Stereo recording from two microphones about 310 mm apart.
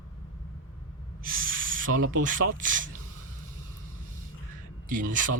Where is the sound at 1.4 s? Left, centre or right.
Right.